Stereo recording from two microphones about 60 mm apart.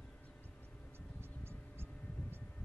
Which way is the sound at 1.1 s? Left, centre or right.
Right.